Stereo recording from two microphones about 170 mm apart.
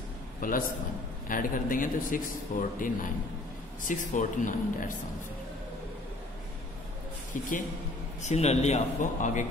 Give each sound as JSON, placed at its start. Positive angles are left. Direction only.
{"t": 0.4, "sound": "a man's voice", "side_deg": 55}
{"t": 7.3, "sound": "a man's voice", "side_deg": 50}